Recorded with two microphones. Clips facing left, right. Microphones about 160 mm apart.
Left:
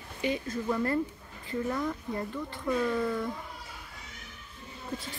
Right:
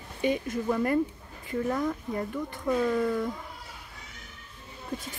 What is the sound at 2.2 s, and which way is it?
Speech, 15° right (ahead or behind).